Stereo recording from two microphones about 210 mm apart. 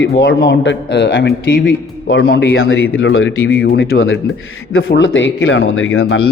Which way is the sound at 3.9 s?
70° left (ahead or behind).